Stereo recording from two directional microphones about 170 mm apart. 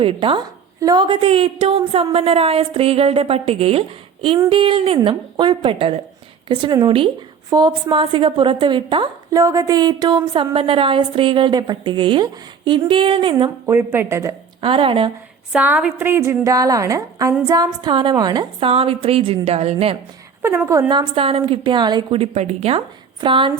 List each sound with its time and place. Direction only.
0.0 s a woman's voice: 30° right (ahead or behind)
13.7 s a woman's voice: 15° right (ahead or behind)
14.6 s a woman's voice: 30° right (ahead or behind)
15.5 s a woman's voice: 10° right (ahead or behind); by 20.0 s 35° right (ahead or behind)
20.7 s a woman's voice: 20° right (ahead or behind)